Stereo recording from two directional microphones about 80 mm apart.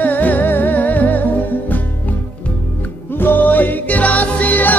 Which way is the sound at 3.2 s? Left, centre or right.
Left.